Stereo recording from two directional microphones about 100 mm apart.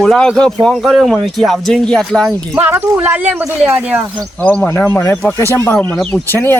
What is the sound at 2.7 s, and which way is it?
Speech, 20° right (ahead or behind).